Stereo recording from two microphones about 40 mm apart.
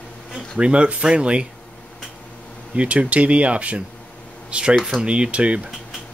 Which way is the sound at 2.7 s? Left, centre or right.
Right.